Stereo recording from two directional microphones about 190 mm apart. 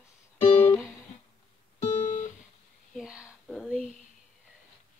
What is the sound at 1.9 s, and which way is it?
Music, 40° left (ahead or behind).